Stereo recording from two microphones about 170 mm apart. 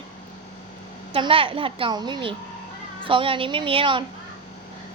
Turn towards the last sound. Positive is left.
turn(degrees=-30)  # may be behind; listen again after turning